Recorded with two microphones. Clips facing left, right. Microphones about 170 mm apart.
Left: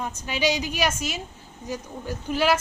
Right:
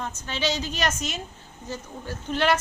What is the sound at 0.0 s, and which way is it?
Speech, 15° left (ahead or behind).